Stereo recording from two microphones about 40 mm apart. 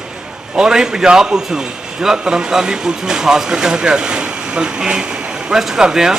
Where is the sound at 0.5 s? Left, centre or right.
Centre.